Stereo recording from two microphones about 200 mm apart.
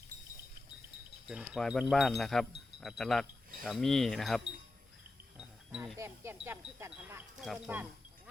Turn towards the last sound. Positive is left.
turn(degrees=-5)  # may be behind; listen again after turning